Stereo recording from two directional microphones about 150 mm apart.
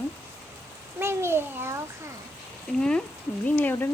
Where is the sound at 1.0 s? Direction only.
15° right (ahead or behind).